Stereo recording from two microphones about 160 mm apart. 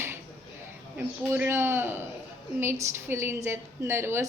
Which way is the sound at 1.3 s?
15° right (ahead or behind).